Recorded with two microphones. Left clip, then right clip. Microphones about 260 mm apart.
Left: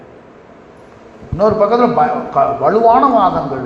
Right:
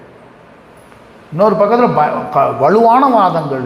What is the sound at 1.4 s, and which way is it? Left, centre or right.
A man's voice, right.